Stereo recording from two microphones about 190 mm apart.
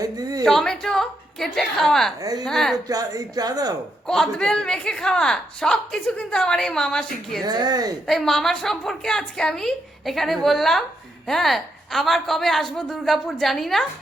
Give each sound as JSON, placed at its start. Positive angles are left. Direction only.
{"t": 0.0, "sound": "speech", "side_deg": -20}
{"t": 0.4, "sound": "a man's voice", "side_deg": 0}
{"t": 2.7, "sound": "speech", "side_deg": -20}
{"t": 4.0, "sound": "a man's voice", "side_deg": 0}
{"t": 7.4, "sound": "speech", "side_deg": -20}
{"t": 8.0, "sound": "a man's voice", "side_deg": 0}